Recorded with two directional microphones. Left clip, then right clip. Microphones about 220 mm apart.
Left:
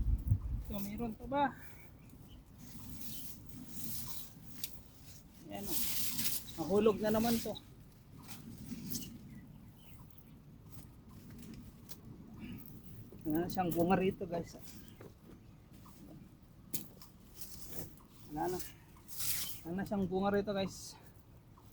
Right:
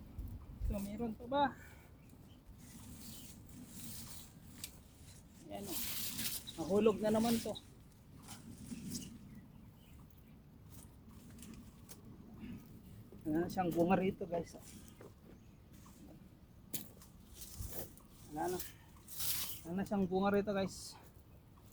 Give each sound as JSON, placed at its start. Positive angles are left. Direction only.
{"t": 0.7, "sound": "speech", "side_deg": 5}
{"t": 3.9, "sound": "a sound", "side_deg": 0}
{"t": 5.5, "sound": "speech", "side_deg": 0}
{"t": 13.2, "sound": "speech", "side_deg": 10}
{"t": 16.7, "sound": "a sound", "side_deg": -20}
{"t": 18.3, "sound": "speech", "side_deg": -20}